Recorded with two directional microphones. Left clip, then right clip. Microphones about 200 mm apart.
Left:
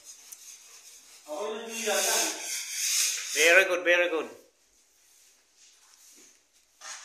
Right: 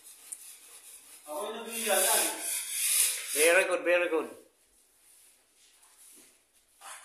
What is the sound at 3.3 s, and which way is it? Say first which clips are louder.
Speech: left 4 dB; centre (ahead or behind).